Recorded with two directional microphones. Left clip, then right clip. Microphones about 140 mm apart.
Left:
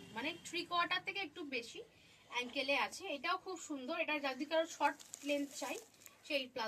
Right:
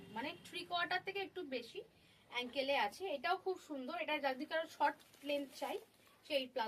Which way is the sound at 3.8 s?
35° right (ahead or behind).